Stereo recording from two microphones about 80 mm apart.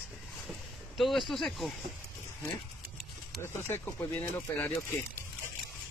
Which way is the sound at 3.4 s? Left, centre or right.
Left.